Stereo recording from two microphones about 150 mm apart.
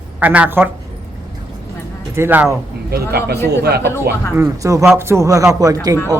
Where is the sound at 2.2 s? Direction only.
10° right (ahead or behind).